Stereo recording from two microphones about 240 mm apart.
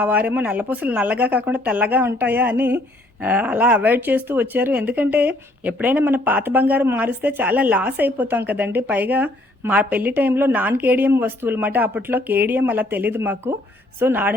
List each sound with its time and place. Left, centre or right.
0.0 s speech: centre